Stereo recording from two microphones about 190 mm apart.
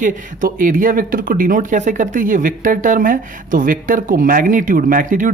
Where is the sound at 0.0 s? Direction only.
45° right (ahead or behind).